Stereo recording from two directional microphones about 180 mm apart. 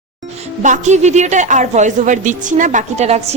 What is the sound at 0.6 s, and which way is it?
A woman's voice, 40° right (ahead or behind).